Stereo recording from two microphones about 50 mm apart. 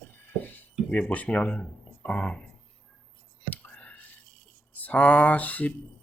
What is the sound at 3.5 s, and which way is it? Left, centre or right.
Whispering, left.